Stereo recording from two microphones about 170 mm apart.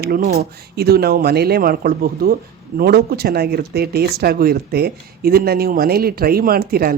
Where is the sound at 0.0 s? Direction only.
65° right (ahead or behind).